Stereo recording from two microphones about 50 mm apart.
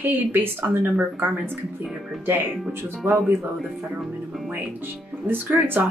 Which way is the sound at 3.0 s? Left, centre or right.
Right.